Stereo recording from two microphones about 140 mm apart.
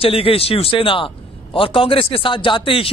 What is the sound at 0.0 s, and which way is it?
A man's voice, 40° left (ahead or behind).